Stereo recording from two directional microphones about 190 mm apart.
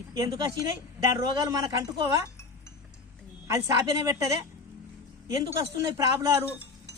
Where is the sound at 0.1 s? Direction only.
20° right (ahead or behind).